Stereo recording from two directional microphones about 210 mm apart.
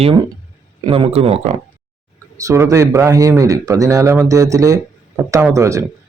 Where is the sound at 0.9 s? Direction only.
25° right (ahead or behind).